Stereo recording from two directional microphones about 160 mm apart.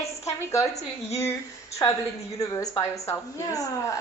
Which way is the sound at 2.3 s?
20° left (ahead or behind).